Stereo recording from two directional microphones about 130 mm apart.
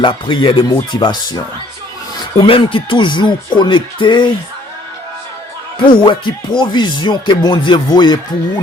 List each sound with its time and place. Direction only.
0.0 s speech: 40° left (ahead or behind)
2.4 s speech: 40° left (ahead or behind)
5.8 s speech: 40° left (ahead or behind)